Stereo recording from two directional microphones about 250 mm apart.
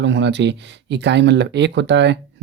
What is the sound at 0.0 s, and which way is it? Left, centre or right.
Speech, right.